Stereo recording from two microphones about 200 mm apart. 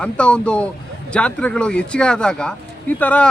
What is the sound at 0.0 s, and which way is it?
Speech, 5° left (ahead or behind).